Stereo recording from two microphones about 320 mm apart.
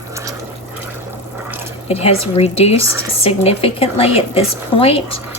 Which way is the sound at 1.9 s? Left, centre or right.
Centre.